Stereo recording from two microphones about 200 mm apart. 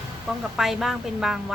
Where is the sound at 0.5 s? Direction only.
Centre (ahead or behind).